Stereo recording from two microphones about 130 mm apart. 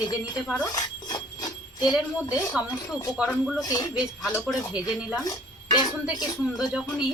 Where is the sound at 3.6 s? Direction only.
30° left (ahead or behind).